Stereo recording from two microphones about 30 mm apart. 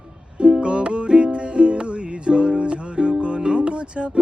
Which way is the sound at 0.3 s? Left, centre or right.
Right.